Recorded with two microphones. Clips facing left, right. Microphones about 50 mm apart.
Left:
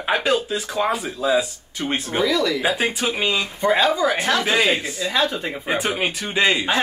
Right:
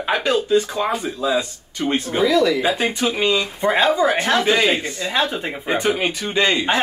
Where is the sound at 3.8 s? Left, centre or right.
Right.